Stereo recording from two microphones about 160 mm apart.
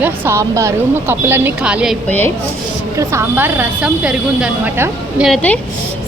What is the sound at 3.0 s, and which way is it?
A woman's voice, 15° right (ahead or behind).